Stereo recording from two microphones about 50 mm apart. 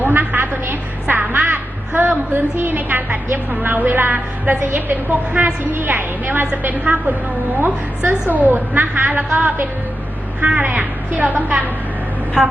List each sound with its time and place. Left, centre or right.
0.0 s a sound: right
5.7 s a woman's voice: right
12.4 s a woman's voice: centre